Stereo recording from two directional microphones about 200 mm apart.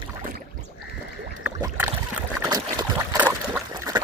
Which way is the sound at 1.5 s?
10° right (ahead or behind).